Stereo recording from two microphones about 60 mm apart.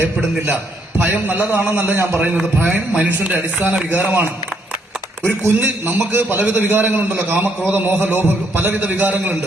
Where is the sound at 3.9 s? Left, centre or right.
Right.